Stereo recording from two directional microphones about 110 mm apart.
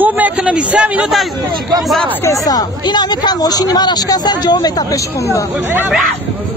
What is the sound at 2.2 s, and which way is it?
Speech, 30° left (ahead or behind).